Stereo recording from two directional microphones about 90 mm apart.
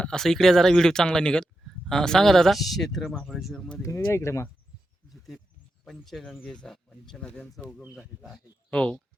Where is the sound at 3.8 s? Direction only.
35° left (ahead or behind).